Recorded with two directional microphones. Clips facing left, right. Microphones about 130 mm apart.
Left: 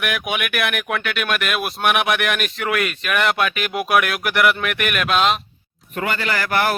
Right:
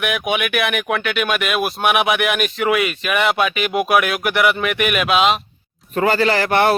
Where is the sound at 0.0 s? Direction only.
Centre (ahead or behind).